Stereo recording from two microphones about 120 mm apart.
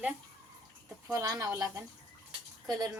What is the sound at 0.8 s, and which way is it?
Speech, 30° right (ahead or behind).